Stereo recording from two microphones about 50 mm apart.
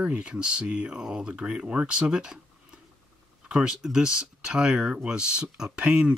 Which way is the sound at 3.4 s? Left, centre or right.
Centre.